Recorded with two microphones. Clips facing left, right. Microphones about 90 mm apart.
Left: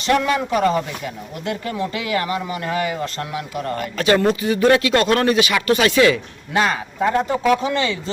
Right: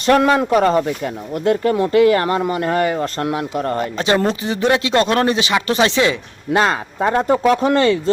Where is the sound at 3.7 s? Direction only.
25° right (ahead or behind).